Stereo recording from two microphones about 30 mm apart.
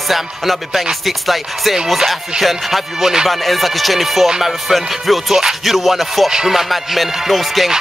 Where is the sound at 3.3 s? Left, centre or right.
Centre.